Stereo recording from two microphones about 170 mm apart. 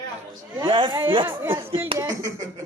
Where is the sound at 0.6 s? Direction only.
30° right (ahead or behind).